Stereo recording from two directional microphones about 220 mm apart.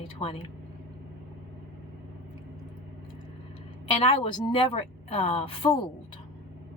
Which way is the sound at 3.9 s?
25° left (ahead or behind).